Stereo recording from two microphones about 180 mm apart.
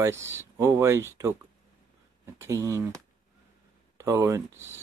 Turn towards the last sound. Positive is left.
turn(degrees=-15)  # may be behind; listen again after turning